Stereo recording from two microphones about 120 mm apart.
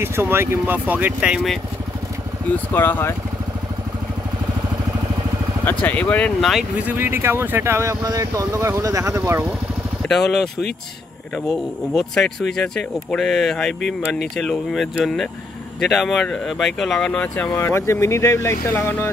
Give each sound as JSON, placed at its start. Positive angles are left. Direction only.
{"t": 0.0, "sound": "speech", "side_deg": -20}
{"t": 2.5, "sound": "speech", "side_deg": 15}
{"t": 5.7, "sound": "speech", "side_deg": 15}
{"t": 6.8, "sound": "speech", "side_deg": -15}
{"t": 10.0, "sound": "speech", "side_deg": 0}
{"t": 11.9, "sound": "speech", "side_deg": 5}
{"t": 17.6, "sound": "speech", "side_deg": 20}